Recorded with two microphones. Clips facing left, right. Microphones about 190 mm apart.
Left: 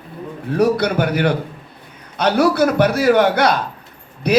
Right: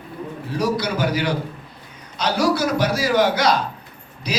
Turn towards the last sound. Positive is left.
turn(degrees=60)  # may be behind; listen again after turning